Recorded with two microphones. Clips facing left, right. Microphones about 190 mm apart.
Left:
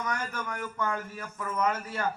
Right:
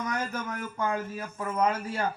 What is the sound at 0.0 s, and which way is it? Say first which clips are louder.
A man's voice: right 2 dB; 30° right (ahead or behind).